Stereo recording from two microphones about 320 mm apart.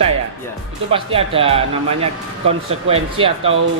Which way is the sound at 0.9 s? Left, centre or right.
Centre.